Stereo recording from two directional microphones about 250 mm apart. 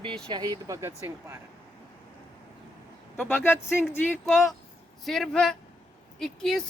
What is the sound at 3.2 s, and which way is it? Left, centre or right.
Speech, centre.